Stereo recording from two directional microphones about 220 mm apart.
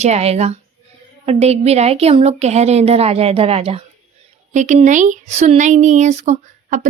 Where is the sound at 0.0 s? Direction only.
30° right (ahead or behind).